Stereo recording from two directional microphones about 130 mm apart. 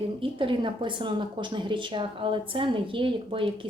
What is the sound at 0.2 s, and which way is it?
A woman's voice, 40° right (ahead or behind).